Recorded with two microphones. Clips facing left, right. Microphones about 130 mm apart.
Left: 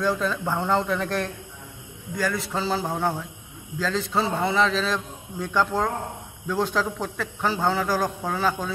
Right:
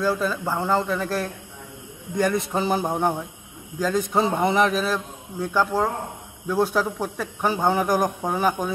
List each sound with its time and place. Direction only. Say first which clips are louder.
0.0 s speech: right 1 dB; 5° right (ahead or behind)
2.1 s a man's voice: right 4 dB; 20° right (ahead or behind)